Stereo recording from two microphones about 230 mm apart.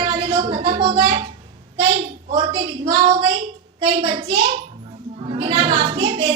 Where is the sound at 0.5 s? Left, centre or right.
Right.